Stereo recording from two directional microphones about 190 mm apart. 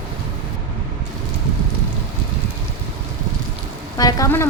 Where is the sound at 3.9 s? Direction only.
20° left (ahead or behind).